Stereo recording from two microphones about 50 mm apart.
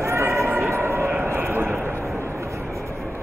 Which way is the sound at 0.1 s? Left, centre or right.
Right.